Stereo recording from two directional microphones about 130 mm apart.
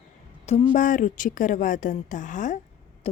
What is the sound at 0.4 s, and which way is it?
Speech, 55° left (ahead or behind).